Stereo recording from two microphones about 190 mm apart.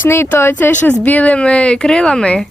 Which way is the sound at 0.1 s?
10° left (ahead or behind).